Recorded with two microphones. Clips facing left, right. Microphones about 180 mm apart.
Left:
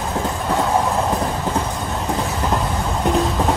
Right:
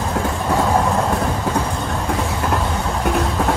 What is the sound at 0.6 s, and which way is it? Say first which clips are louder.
Train: right 1 dB; centre (ahead or behind).